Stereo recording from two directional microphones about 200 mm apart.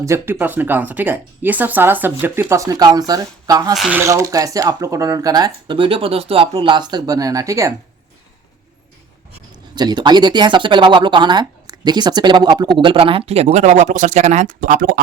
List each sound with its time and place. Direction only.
0.0 s speech: 15° right (ahead or behind)
3.8 s speech: 5° right (ahead or behind)
9.7 s speech: 20° right (ahead or behind); by 14.9 s 45° right (ahead or behind)